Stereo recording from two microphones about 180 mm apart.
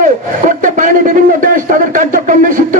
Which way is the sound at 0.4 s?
45° right (ahead or behind).